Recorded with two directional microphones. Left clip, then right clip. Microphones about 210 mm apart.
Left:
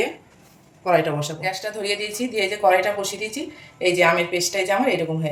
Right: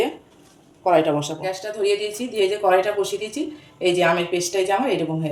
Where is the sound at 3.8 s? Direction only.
15° left (ahead or behind).